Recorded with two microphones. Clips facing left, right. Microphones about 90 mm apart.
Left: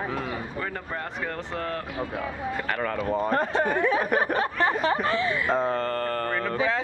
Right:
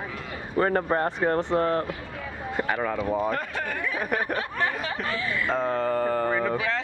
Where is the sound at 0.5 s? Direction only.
45° right (ahead or behind).